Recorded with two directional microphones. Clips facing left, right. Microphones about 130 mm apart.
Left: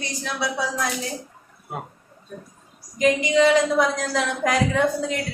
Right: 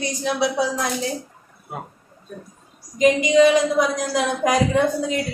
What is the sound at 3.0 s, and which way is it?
Speech, 15° right (ahead or behind).